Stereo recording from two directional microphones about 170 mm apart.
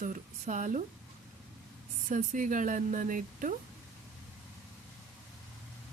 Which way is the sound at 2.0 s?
50° right (ahead or behind).